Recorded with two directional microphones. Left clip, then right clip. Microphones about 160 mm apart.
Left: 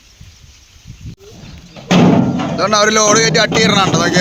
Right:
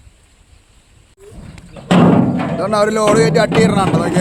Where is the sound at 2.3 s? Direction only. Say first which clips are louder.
Even; 20° left (ahead or behind).